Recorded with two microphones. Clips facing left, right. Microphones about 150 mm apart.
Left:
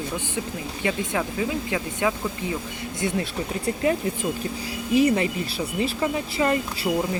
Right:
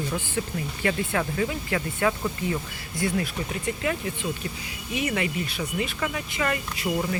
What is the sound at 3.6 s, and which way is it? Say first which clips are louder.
Speech: left 6 dB; 30° left (ahead or behind).